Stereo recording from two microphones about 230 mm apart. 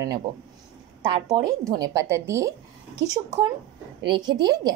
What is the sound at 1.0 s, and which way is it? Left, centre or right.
A woman's voice, centre.